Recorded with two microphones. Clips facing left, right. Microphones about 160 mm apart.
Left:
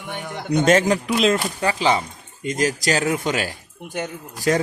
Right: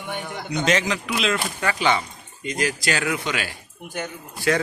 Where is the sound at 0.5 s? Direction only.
50° left (ahead or behind).